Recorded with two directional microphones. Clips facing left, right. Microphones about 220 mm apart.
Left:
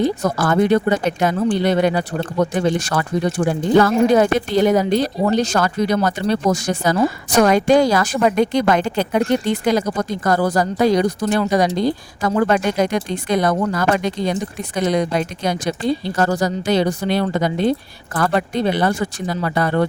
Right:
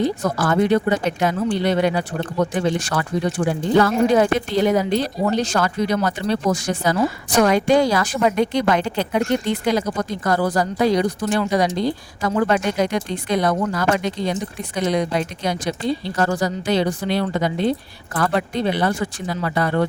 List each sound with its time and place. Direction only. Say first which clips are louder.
0.0 s speech: left 2 dB; 50° left (ahead or behind)